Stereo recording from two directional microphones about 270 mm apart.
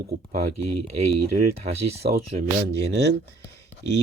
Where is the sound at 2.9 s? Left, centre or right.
Right.